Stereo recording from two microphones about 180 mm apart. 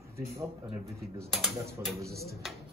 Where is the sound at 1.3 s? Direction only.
Centre (ahead or behind).